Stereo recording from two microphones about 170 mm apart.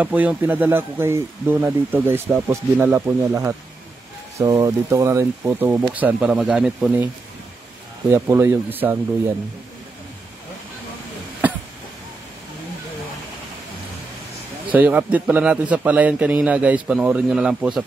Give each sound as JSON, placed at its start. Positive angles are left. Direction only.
{"t": 0.0, "sound": "a man's voice", "side_deg": -10}
{"t": 8.1, "sound": "speech", "side_deg": -15}
{"t": 14.7, "sound": "a man's voice", "side_deg": -10}